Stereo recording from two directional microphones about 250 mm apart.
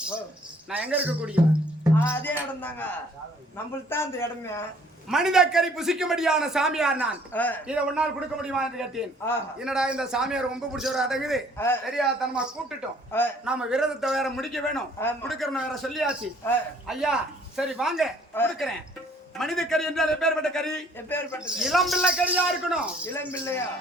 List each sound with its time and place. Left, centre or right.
0.7 s a man's voice: centre
2.0 s speech: centre
5.0 s a man's voice: centre
7.3 s speech: centre
7.7 s a man's voice: centre
11.5 s speech: centre
11.9 s a man's voice: centre
13.1 s speech: centre
13.4 s a man's voice: centre
23.0 s speech: centre